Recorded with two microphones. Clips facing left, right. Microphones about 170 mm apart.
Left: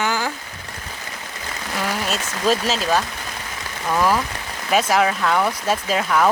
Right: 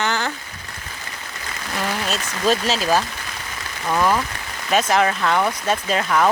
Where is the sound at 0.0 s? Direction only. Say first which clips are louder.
Even; 10° left (ahead or behind).